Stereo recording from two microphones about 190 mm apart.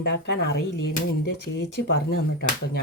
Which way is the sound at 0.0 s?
60° left (ahead or behind).